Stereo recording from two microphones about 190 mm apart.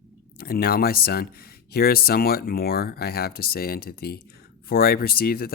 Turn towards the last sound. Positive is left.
turn(degrees=55)  # may be behind; listen again after turning